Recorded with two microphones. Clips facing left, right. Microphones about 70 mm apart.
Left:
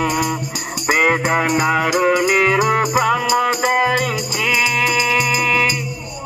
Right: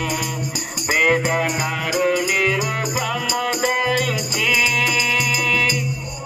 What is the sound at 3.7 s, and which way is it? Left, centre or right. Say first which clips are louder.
Music: left 4 dB; left.